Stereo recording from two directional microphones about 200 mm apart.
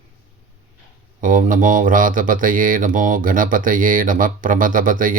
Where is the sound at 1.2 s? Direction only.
40° right (ahead or behind).